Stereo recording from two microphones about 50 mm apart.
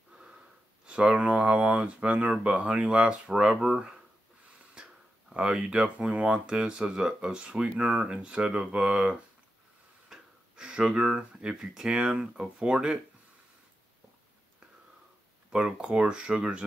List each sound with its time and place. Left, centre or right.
0.1 s wheeze: centre
0.8 s speech: right
4.7 s a sound: centre
6.1 s speech: centre
10.0 s a sound: centre
11.6 s speech: centre
15.5 s speech: centre